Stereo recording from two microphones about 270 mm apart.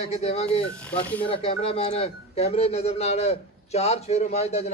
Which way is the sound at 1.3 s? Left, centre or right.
Left.